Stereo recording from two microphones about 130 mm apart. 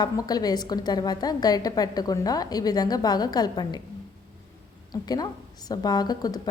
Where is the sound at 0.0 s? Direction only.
30° left (ahead or behind).